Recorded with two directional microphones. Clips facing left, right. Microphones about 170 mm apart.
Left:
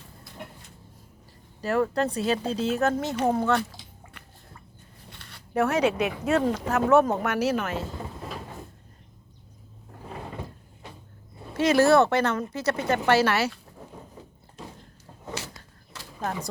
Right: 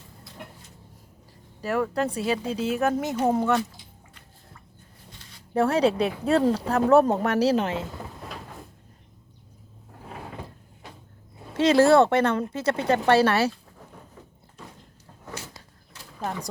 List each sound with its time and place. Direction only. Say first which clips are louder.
1.6 s speech: left 1 dB; 10° right (ahead or behind)
4.1 s a sound: left 2 dB; 65° left (ahead or behind)
5.5 s speech: right 2 dB; 30° right (ahead or behind)
8.3 s cupboard open or close: left 2 dB; centre (ahead or behind)
11.5 s speech: right 2 dB; 30° right (ahead or behind)
15.4 s a sound: left 3 dB; 90° left